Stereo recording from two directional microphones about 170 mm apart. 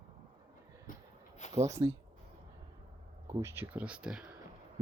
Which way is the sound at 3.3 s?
15° right (ahead or behind).